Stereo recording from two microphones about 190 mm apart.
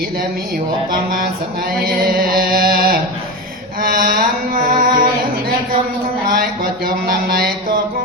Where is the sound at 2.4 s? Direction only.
50° right (ahead or behind).